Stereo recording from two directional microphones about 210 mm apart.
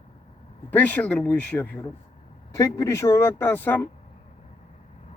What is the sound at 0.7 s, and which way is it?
Speech, 5° left (ahead or behind).